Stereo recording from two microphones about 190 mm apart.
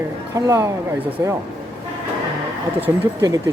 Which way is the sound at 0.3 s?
15° right (ahead or behind).